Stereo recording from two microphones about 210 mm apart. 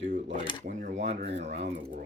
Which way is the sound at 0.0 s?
35° right (ahead or behind).